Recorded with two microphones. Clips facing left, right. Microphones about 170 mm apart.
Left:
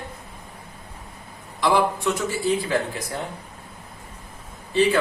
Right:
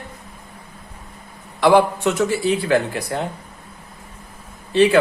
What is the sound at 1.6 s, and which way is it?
Speech, 70° right (ahead or behind).